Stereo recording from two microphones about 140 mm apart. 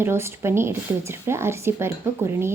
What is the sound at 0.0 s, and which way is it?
A woman's voice, 15° right (ahead or behind).